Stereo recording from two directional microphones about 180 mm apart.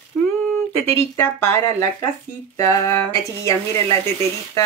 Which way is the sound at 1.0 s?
15° left (ahead or behind).